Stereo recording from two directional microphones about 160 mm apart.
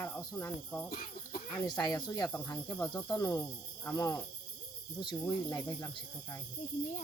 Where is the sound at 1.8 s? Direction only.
20° left (ahead or behind).